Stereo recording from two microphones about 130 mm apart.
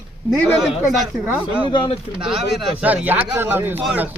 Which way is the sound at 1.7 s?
40° left (ahead or behind).